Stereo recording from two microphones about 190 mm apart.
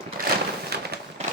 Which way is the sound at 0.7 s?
55° right (ahead or behind).